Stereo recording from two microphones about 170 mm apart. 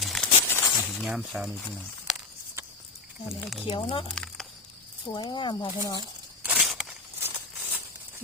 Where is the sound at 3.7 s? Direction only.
30° left (ahead or behind).